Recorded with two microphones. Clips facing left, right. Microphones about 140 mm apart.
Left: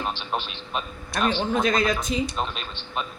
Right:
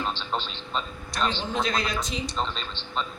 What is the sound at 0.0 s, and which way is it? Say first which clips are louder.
Speech: left 1 dB; 15° left (ahead or behind).